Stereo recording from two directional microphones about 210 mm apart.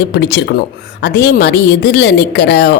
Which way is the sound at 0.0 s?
55° left (ahead or behind).